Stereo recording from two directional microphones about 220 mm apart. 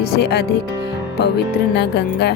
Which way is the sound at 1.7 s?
50° left (ahead or behind).